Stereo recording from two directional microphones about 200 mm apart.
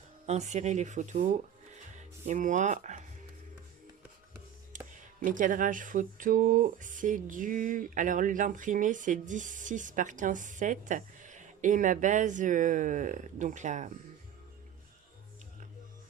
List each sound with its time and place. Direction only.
0.3 s speech: 35° right (ahead or behind)
4.7 s a sound: 40° right (ahead or behind)
5.2 s speech: 40° right (ahead or behind)